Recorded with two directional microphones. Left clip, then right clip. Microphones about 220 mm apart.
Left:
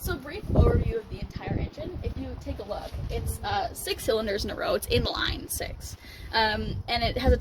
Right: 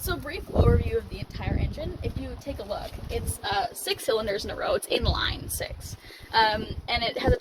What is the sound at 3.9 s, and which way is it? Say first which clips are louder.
Speech: even; 50° left (ahead or behind).